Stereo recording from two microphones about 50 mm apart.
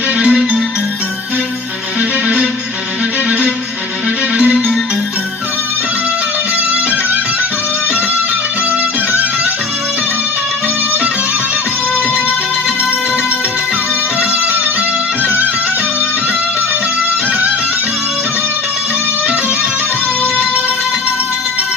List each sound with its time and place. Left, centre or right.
0.2 s music: centre
2.0 s music: right
15.2 s music: right